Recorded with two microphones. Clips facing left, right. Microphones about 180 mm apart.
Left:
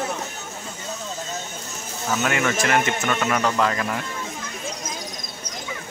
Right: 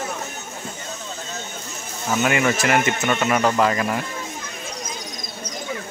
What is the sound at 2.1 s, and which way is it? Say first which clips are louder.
Speech: right 3 dB; 10° right (ahead or behind).